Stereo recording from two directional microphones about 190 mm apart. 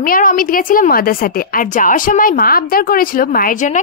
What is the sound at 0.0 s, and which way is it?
A woman's voice, 45° left (ahead or behind).